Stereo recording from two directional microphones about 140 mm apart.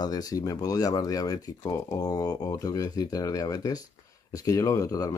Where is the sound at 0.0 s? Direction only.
25° left (ahead or behind).